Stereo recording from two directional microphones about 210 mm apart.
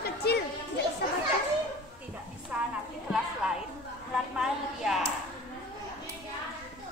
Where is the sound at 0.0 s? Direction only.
50° left (ahead or behind).